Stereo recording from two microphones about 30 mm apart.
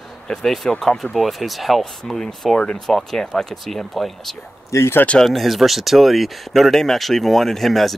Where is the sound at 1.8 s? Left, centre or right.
Centre.